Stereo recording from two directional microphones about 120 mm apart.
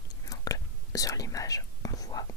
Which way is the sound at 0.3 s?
30° left (ahead or behind).